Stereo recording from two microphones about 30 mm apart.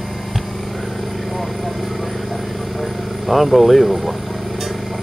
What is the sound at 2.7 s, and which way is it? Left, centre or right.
Vehicle, centre.